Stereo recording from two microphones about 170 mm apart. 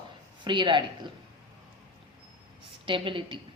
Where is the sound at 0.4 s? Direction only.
30° right (ahead or behind).